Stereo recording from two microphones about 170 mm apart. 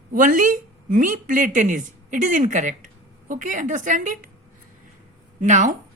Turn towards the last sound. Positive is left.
turn(degrees=-45)  # may be behind; listen again after turning